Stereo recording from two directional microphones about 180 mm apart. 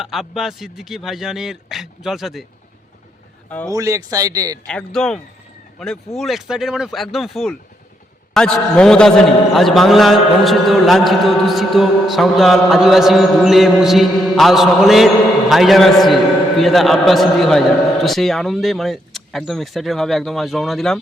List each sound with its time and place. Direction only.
0.0 s a man's voice: centre (ahead or behind)
3.7 s speech: 15° right (ahead or behind)
4.6 s a man's voice: 5° left (ahead or behind)